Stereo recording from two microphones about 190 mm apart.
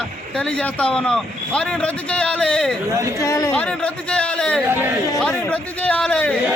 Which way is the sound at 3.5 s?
5° left (ahead or behind).